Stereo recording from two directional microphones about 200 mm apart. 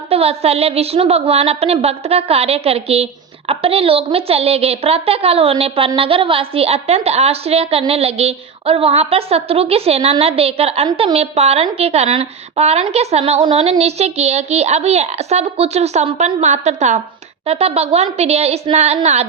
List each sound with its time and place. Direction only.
0.1 s a woman's voice: 30° right (ahead or behind)